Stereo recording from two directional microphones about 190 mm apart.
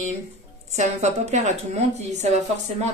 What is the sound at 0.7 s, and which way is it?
Speech, 35° right (ahead or behind).